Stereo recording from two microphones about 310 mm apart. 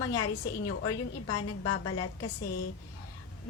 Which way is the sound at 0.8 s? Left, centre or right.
Left.